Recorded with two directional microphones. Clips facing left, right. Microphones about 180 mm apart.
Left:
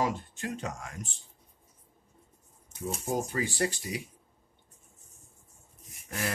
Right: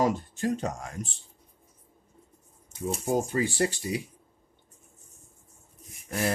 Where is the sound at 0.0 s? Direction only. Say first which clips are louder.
Right 5 dB; 40° right (ahead or behind).